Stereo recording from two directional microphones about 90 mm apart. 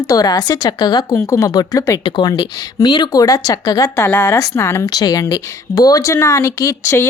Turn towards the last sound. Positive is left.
turn(degrees=35)  # may be behind; listen again after turning